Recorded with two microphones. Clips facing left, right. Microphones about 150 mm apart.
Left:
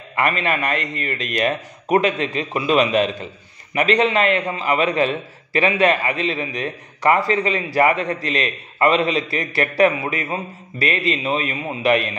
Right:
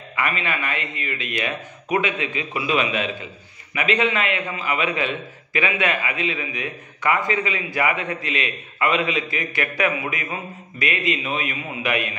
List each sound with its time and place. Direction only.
0.1 s a man's voice: 40° left (ahead or behind)